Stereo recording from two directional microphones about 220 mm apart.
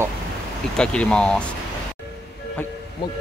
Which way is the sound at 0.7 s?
5° left (ahead or behind).